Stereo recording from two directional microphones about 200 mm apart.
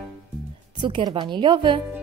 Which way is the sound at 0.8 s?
25° right (ahead or behind).